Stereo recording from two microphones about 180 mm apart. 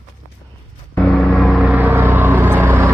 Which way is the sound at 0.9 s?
5° left (ahead or behind).